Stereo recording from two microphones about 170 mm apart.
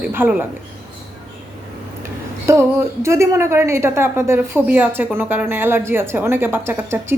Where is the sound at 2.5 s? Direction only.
15° right (ahead or behind).